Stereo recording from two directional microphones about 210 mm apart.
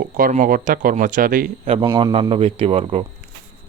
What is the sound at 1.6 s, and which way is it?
A man's voice, 25° right (ahead or behind).